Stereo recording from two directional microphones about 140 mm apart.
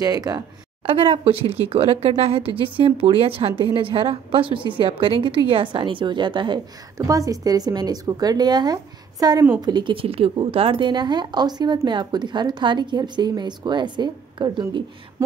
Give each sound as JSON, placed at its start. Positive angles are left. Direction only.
{"t": 0.0, "sound": "speech", "side_deg": -25}
{"t": 0.8, "sound": "speech", "side_deg": -40}